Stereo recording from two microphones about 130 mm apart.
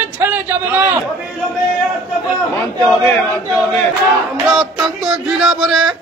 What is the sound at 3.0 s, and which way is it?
Chant, 20° left (ahead or behind).